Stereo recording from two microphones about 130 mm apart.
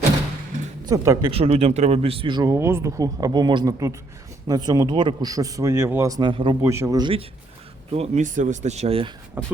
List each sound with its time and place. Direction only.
0.9 s a man's voice: 25° right (ahead or behind)
1.3 s a man's voice: 50° right (ahead or behind)
2.5 s a man's voice: 20° right (ahead or behind)
6.2 s speech: 40° right (ahead or behind)
6.6 s a man's voice: 20° right (ahead or behind)
7.0 s a man's voice: 45° right (ahead or behind)
7.9 s speech: 55° right (ahead or behind)
9.4 s speech: 15° right (ahead or behind)